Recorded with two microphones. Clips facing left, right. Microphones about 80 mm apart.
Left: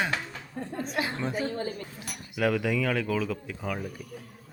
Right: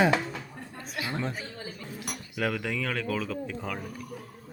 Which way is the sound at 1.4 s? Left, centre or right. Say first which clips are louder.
Left 9 dB; left.